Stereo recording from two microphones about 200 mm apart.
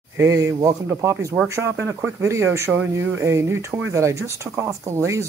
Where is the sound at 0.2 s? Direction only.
15° right (ahead or behind).